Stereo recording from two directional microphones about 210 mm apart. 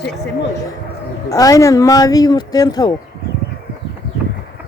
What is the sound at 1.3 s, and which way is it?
Speech, 15° left (ahead or behind).